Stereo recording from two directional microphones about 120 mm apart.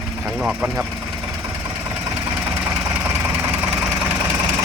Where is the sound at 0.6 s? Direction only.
15° right (ahead or behind).